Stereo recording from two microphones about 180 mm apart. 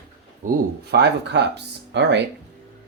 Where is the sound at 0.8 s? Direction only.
70° right (ahead or behind).